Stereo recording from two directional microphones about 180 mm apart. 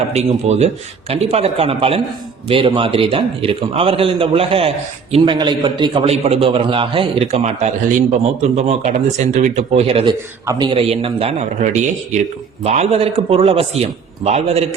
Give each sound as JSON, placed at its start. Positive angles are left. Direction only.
{"t": 0.1, "sound": "a man's voice", "side_deg": -40}